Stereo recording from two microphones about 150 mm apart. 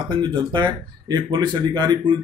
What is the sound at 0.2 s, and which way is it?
Speech, 30° right (ahead or behind).